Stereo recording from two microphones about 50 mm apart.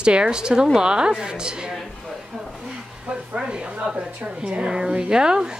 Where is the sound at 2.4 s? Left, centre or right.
Centre.